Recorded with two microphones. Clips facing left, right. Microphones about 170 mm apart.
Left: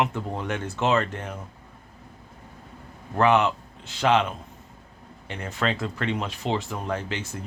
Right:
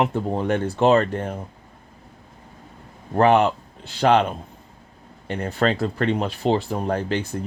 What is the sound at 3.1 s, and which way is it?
Speech, 35° right (ahead or behind).